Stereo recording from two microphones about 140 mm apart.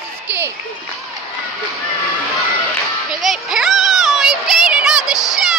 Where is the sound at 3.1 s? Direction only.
Centre (ahead or behind).